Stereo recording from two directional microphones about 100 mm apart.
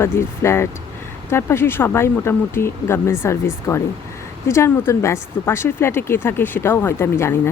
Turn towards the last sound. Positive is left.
turn(degrees=25)  # may be behind; listen again after turning